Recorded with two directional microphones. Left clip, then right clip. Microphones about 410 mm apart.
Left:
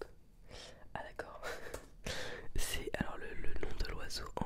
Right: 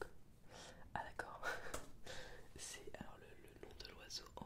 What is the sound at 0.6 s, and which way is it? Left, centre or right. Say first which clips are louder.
Whispering: left 2 dB; left.